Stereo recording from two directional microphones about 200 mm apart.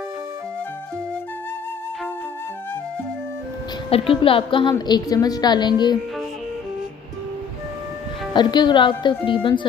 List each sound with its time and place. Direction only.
3.9 s a woman's voice: 25° left (ahead or behind)
8.3 s a woman's voice: 20° left (ahead or behind)